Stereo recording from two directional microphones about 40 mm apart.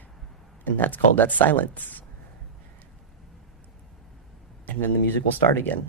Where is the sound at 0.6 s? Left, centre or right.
Left.